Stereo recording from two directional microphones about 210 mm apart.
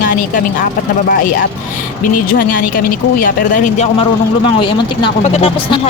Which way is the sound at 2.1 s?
40° left (ahead or behind).